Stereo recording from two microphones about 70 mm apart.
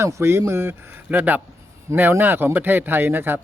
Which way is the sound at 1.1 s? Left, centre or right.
Right.